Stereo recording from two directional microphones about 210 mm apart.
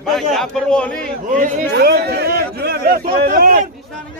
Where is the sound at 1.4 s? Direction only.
45° right (ahead or behind).